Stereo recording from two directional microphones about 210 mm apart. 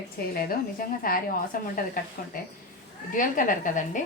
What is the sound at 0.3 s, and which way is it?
A woman's voice, 45° left (ahead or behind).